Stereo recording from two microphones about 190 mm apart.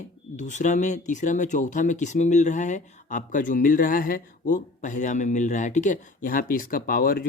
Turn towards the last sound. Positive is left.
turn(degrees=50)  # may be behind; listen again after turning